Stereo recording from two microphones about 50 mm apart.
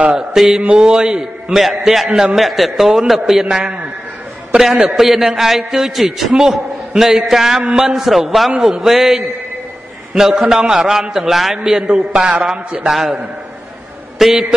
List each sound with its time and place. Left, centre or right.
0.2 s a man's voice: centre
0.6 s a man's voice: centre
1.6 s a man's voice: centre
4.5 s a man's voice: right
4.8 s a man's voice: centre
7.9 s a man's voice: centre
14.1 s a man's voice: centre